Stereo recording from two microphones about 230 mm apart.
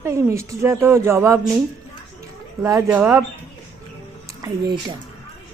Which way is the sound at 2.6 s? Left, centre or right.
Centre.